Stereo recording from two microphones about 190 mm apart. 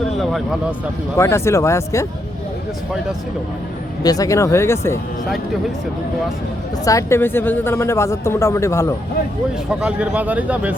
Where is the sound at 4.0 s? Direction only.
20° left (ahead or behind).